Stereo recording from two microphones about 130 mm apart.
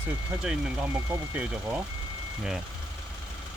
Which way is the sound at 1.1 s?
10° right (ahead or behind).